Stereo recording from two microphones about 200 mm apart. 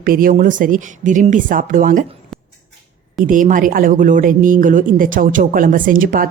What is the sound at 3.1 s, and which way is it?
Speech, 40° right (ahead or behind).